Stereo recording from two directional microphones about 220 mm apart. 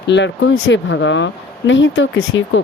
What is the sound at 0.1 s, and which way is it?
Speech, 60° left (ahead or behind).